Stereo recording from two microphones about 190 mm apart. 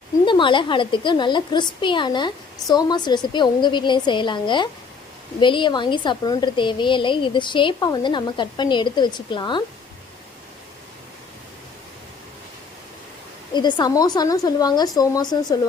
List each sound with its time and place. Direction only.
0.3 s a woman's voice: 25° left (ahead or behind)
13.5 s a woman's voice: 25° left (ahead or behind)